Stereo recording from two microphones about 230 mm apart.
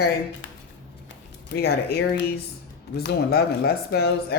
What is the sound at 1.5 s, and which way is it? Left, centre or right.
Speech, left.